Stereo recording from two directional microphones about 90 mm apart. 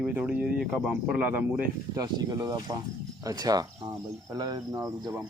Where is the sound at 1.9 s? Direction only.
45° right (ahead or behind).